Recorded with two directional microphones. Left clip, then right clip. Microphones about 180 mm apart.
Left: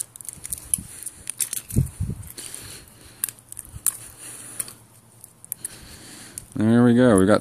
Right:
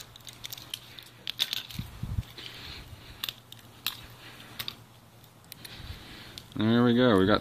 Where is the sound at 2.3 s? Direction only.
40° left (ahead or behind).